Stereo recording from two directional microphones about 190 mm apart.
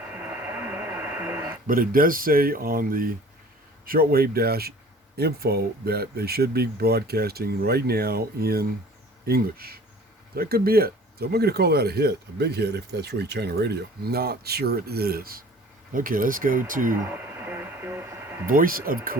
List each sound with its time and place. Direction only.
0.0 s radio: 10° right (ahead or behind)
1.6 s speech: 50° right (ahead or behind)
17.0 s radio: 10° right (ahead or behind)
18.4 s speech: 50° right (ahead or behind)